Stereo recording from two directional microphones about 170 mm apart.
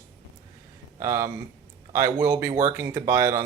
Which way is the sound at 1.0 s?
20° right (ahead or behind).